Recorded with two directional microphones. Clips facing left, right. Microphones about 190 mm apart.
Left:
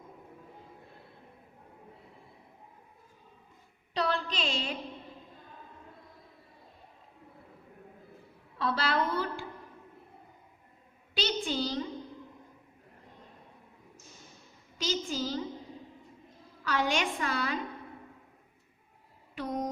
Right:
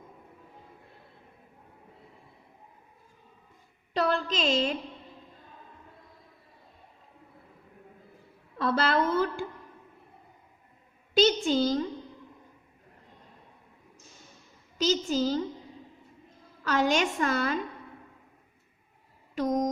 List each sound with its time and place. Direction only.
3.9 s a sound: 45° right (ahead or behind)
8.5 s a woman's voice: 45° right (ahead or behind)
11.1 s a sound: 45° right (ahead or behind)
11.4 s a woman's voice: 45° right (ahead or behind)
14.8 s a woman's voice: 40° right (ahead or behind)
16.6 s a woman's voice: 45° right (ahead or behind)
19.4 s mantra: 40° right (ahead or behind)